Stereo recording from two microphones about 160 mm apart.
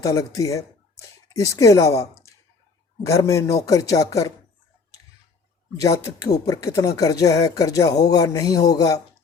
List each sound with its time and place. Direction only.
0.0 s speech: 20° left (ahead or behind)
3.1 s speech: 20° left (ahead or behind)
5.8 s speech: 20° left (ahead or behind)